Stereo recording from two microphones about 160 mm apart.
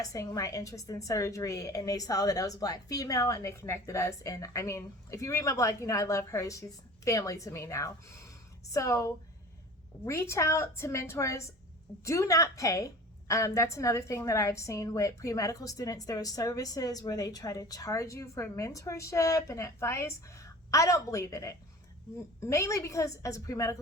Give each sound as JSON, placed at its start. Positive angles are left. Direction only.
{"t": 0.0, "sound": "a woman's voice", "side_deg": 20}